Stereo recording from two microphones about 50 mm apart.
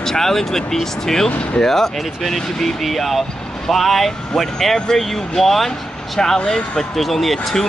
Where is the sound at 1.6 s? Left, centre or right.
Centre.